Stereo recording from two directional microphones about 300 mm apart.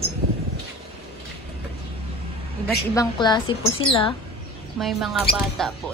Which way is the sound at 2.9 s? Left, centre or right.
Centre.